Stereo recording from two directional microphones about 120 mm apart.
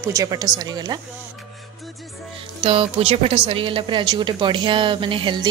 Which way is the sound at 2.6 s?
50° right (ahead or behind).